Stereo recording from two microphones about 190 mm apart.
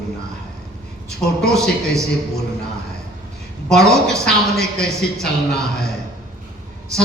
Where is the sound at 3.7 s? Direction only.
Centre (ahead or behind).